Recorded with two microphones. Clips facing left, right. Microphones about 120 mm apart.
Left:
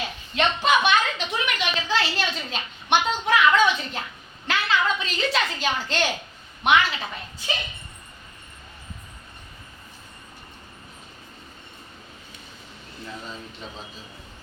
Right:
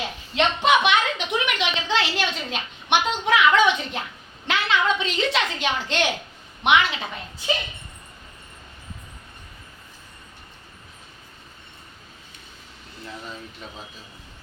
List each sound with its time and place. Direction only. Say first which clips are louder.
0.3 s a woman's voice: right 2 dB; 20° right (ahead or behind)